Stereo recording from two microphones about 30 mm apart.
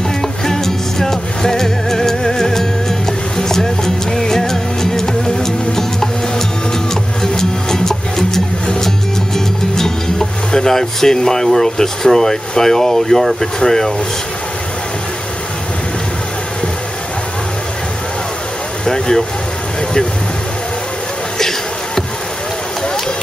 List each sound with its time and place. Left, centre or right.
0.2 s music: centre
13.4 s speech: centre
18.9 s speech: left
21.4 s a sound: centre